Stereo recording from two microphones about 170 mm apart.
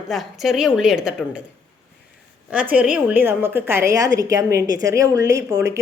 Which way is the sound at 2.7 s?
10° right (ahead or behind).